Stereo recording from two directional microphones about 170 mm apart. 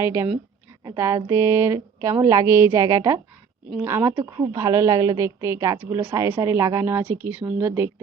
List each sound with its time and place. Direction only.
0.0 s speech: 15° right (ahead or behind)